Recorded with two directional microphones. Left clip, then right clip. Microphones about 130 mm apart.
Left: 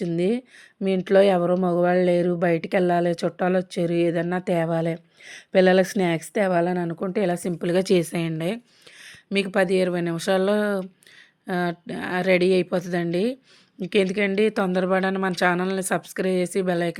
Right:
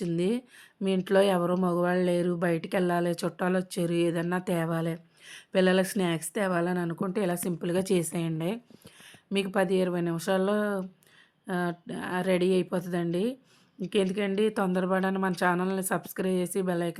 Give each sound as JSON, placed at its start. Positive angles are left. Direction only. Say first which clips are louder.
{"t": 0.0, "sound": "speech", "louder": "left 5 dB", "side_deg": 20}
{"t": 8.3, "sound": "a woman's voice", "louder": "left 5 dB", "side_deg": 15}